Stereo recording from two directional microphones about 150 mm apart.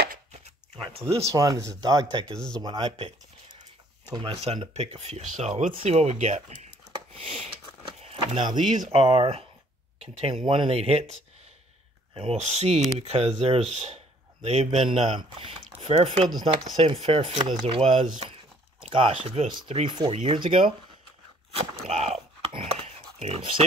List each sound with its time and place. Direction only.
1.3 s speech: 25° right (ahead or behind)
2.2 s speech: 5° left (ahead or behind)
2.6 s speech: 30° right (ahead or behind)
4.1 s speech: 35° right (ahead or behind); by 6.7 s 50° right (ahead or behind)
7.2 s speech: 40° right (ahead or behind)
8.2 s speech: 30° right (ahead or behind)
8.9 s speech: 40° right (ahead or behind)
21.5 s a sound: 45° right (ahead or behind)